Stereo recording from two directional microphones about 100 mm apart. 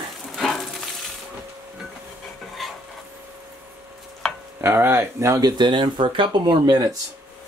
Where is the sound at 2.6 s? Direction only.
Centre (ahead or behind).